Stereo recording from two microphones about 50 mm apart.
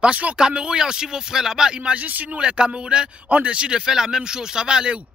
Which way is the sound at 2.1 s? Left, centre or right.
Right.